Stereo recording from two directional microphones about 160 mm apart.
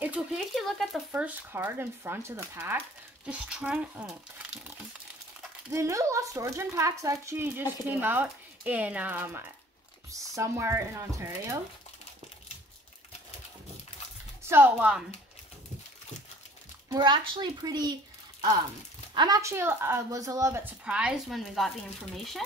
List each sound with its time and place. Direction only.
0.0 s speech: 5° right (ahead or behind)
5.7 s speech: 20° right (ahead or behind)
14.5 s speech: 10° right (ahead or behind)
16.9 s speech: 25° right (ahead or behind)
19.1 s speech: 25° right (ahead or behind)
20.8 s speech: 5° right (ahead or behind)